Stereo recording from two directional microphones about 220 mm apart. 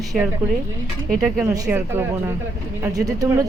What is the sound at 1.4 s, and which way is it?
Speech, 15° right (ahead or behind).